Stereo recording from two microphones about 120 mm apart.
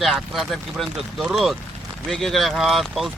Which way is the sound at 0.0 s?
Centre (ahead or behind).